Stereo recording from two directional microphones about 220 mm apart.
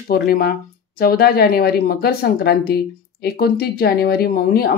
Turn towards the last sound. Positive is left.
turn(degrees=45)  # may be behind; listen again after turning